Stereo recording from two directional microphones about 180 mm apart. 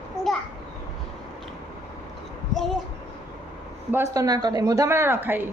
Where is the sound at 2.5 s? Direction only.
Centre (ahead or behind).